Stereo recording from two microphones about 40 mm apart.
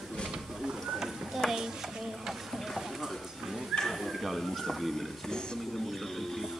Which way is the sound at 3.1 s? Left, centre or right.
Centre.